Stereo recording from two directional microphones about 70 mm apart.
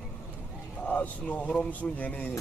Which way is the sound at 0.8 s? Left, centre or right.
Left.